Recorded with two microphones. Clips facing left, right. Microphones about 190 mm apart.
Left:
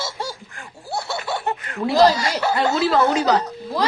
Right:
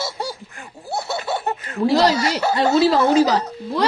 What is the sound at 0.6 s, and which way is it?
Snicker, 20° right (ahead or behind).